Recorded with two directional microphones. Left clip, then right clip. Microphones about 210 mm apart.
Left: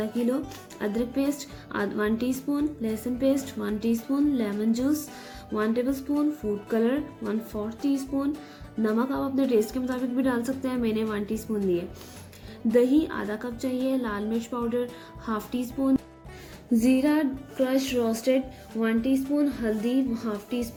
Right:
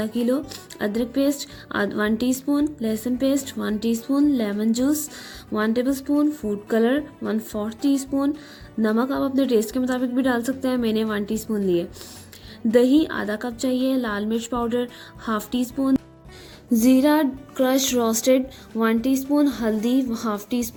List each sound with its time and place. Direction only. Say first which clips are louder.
0.3 s speech: right 5 dB; 35° right (ahead or behind)